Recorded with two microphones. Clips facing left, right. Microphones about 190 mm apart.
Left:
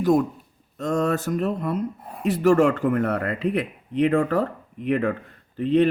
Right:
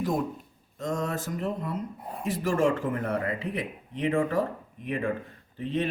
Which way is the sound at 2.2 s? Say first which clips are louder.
Left 7 dB; 70° left (ahead or behind).